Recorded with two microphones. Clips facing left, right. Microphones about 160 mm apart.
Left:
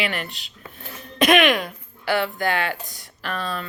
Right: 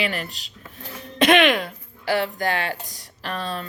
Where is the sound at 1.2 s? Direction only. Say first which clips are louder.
Even; 30° right (ahead or behind).